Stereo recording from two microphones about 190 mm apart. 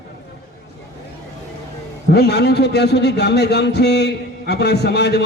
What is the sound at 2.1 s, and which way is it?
A man's voice, 60° left (ahead or behind).